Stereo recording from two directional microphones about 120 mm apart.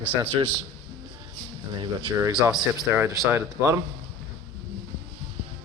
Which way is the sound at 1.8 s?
40° right (ahead or behind).